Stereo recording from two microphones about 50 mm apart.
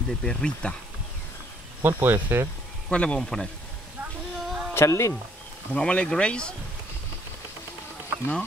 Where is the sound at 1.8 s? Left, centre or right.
Right.